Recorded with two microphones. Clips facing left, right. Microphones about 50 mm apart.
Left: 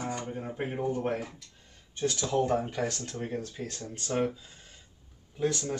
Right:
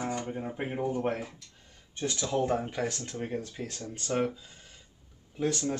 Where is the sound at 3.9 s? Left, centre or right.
Centre.